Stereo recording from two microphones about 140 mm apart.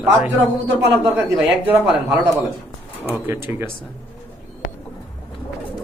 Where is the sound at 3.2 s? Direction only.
15° right (ahead or behind).